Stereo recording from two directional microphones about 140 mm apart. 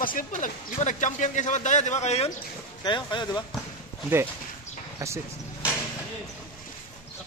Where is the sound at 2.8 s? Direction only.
35° left (ahead or behind).